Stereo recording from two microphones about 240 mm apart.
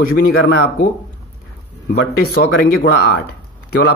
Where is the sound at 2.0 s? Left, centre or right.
Left.